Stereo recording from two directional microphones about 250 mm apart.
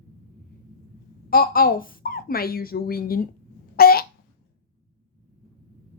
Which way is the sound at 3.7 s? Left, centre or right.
Left.